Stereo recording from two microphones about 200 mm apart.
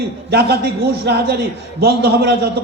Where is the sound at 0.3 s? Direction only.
50° right (ahead or behind).